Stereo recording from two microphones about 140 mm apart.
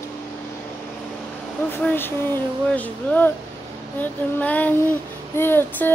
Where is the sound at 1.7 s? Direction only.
15° left (ahead or behind).